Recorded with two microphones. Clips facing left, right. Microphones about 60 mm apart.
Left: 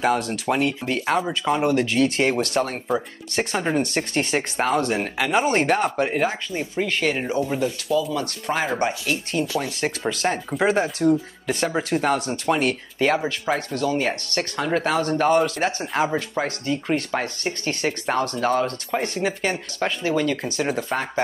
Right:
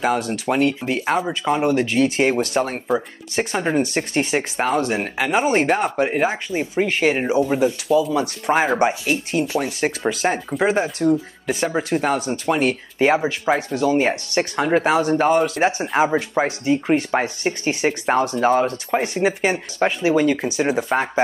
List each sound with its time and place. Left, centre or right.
0.0 s speech: centre
6.1 s speech: centre
9.8 s speech: centre
15.6 s speech: centre